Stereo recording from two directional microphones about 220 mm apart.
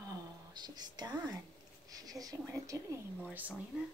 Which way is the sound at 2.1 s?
15° right (ahead or behind).